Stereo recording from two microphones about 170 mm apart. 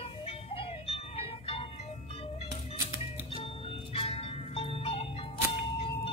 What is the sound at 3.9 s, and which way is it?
Music, 35° left (ahead or behind).